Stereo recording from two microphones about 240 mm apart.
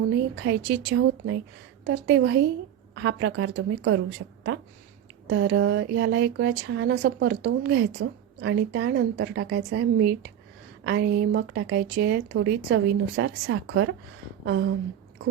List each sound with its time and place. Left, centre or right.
0.4 s speech: right
5.3 s speech: right
14.4 s a sound: right